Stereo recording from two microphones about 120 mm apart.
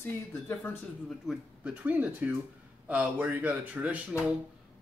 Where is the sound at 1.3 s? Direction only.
10° right (ahead or behind).